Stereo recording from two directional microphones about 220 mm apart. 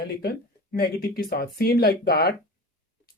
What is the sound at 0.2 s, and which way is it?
Speech, 45° left (ahead or behind).